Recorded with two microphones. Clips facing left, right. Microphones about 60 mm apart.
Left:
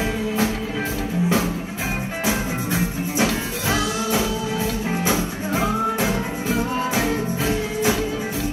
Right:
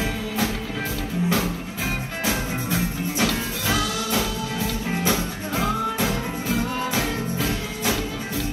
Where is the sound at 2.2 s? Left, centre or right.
Centre.